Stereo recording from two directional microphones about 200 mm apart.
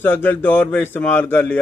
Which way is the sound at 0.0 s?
10° left (ahead or behind).